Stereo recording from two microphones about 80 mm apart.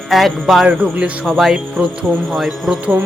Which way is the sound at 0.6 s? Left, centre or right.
Centre.